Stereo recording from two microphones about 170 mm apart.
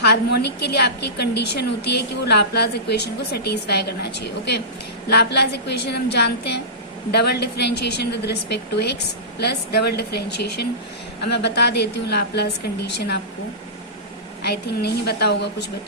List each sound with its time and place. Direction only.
0.0 s a woman's voice: 75° left (ahead or behind)
14.4 s a woman's voice: 70° left (ahead or behind)